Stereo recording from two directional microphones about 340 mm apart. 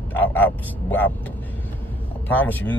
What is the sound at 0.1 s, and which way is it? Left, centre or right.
Speech, centre.